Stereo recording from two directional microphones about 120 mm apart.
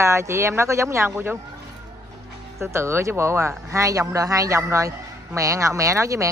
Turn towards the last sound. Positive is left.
turn(degrees=-25)  # may be behind; listen again after turning